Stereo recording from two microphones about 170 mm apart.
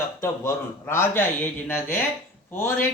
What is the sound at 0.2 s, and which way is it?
Speech, 15° left (ahead or behind).